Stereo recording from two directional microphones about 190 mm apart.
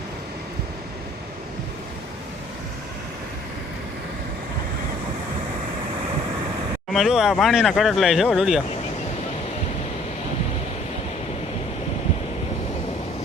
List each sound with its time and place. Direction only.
6.9 s speech: centre (ahead or behind)